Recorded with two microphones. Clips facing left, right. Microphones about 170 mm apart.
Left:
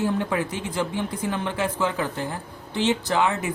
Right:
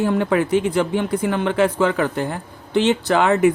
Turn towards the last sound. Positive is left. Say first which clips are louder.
# right 8 dB
turn(degrees=-65)  # may be behind; listen again after turning